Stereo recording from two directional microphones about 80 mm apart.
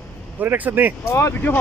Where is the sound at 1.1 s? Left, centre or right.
Left.